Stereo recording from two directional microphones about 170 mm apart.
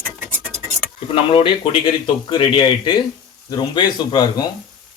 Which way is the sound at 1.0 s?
30° left (ahead or behind).